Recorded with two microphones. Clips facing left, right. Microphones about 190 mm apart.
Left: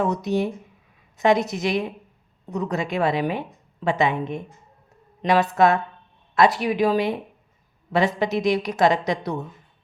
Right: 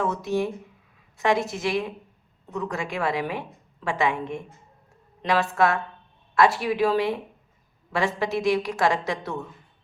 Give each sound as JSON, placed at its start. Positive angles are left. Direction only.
{"t": 0.0, "sound": "a woman's voice", "side_deg": 20}